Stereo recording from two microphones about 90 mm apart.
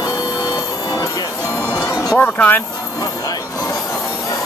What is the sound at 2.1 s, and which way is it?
Speech, 20° left (ahead or behind).